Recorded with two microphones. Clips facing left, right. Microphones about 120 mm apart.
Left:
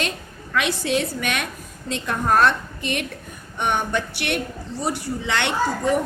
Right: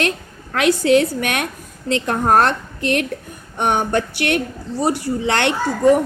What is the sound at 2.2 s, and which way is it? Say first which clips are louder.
A woman's voice: right 2 dB; 50° right (ahead or behind).